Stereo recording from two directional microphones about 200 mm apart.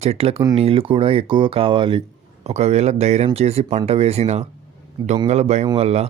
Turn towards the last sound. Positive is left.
turn(degrees=-30)  # may be behind; listen again after turning